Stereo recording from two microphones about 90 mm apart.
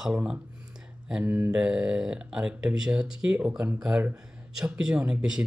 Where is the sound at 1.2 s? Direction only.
25° right (ahead or behind).